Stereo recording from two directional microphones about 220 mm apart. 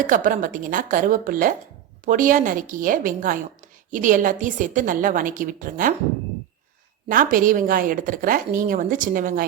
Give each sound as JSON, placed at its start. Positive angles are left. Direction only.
{"t": 0.1, "sound": "a woman's voice", "side_deg": -40}
{"t": 7.1, "sound": "a woman's voice", "side_deg": -40}